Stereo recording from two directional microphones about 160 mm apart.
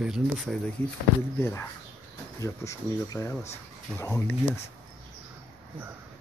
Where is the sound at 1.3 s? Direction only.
15° left (ahead or behind).